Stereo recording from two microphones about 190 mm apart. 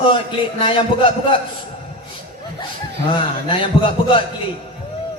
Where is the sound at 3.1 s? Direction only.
25° left (ahead or behind).